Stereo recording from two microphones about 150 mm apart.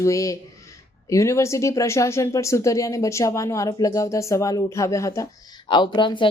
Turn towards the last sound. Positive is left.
turn(degrees=30)  # may be behind; listen again after turning